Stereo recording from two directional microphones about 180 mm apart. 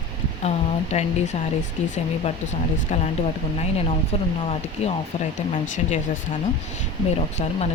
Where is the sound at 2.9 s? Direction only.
40° left (ahead or behind).